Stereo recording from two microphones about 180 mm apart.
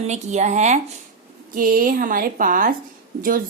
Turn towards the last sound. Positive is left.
turn(degrees=-50)  # may be behind; listen again after turning